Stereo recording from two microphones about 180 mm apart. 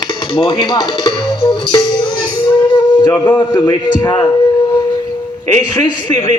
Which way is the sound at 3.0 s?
15° left (ahead or behind).